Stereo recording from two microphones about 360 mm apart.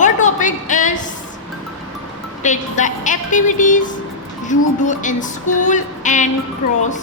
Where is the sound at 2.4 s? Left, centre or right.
Left.